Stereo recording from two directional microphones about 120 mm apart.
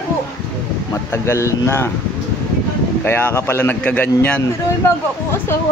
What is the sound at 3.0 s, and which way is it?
A man's voice, 20° left (ahead or behind).